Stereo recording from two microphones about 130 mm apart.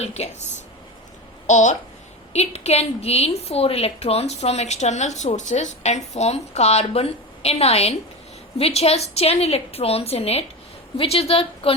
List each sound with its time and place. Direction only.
0.0 s a woman's voice: 55° left (ahead or behind)
2.3 s a woman's voice: 55° left (ahead or behind)